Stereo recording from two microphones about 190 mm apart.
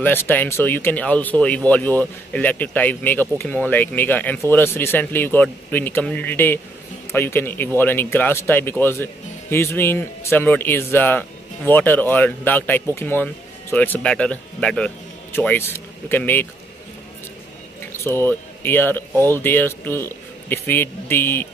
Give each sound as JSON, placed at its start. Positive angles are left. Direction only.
{"t": 0.0, "sound": "speech", "side_deg": 10}
{"t": 18.0, "sound": "speech", "side_deg": 10}